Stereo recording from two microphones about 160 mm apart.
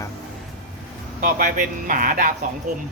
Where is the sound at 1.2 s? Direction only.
60° right (ahead or behind).